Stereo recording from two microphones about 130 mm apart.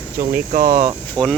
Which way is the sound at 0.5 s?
90° right.